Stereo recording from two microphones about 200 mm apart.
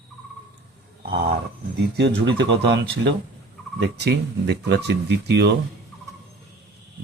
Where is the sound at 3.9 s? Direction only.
55° right (ahead or behind).